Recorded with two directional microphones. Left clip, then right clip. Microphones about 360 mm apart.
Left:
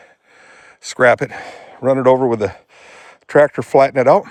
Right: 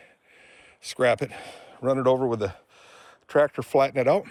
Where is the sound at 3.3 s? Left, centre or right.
Left.